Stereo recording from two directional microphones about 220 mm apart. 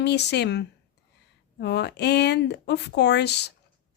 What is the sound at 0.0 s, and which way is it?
Speech, 50° left (ahead or behind).